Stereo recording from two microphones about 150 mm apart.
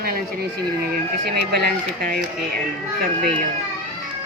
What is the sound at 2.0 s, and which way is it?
Speech, 75° right (ahead or behind).